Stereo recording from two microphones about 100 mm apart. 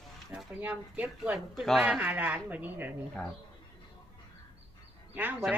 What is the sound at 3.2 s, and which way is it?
Speech, 10° left (ahead or behind).